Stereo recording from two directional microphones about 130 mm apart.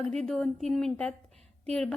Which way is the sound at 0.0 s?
5° left (ahead or behind).